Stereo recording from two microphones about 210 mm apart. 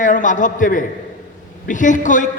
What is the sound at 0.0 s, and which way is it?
A man's voice, 35° left (ahead or behind).